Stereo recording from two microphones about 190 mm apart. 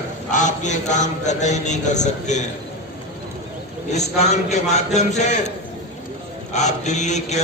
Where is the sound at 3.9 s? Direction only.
35° left (ahead or behind).